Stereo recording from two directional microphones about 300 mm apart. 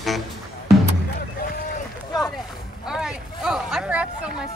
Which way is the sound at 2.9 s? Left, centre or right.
Centre.